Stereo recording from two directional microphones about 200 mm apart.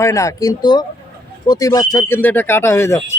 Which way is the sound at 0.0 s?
15° left (ahead or behind).